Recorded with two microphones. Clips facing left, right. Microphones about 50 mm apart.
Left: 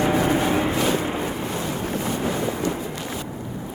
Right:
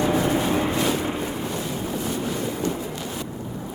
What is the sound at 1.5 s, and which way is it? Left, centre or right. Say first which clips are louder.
Boat: left 2 dB; left.